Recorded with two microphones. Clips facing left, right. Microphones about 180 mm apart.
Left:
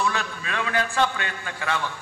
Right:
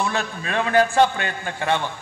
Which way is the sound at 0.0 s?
35° right (ahead or behind).